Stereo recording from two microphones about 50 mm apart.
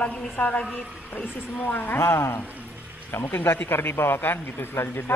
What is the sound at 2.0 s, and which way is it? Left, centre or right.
Speech, left.